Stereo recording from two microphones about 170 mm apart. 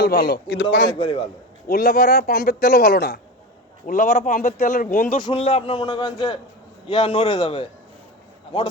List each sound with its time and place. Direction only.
0.0 s a man's voice: 65° left (ahead or behind); by 0.9 s 85° left
1.6 s a man's voice: 60° left (ahead or behind)
3.8 s speech: 50° left (ahead or behind)
5.2 s a man's voice: 35° left (ahead or behind)